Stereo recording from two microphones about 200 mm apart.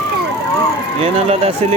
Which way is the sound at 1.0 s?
30° right (ahead or behind).